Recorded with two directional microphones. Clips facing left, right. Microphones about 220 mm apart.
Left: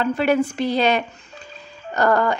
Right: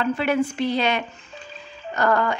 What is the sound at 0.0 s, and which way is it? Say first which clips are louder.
Speech: left 3 dB; 40° left (ahead or behind).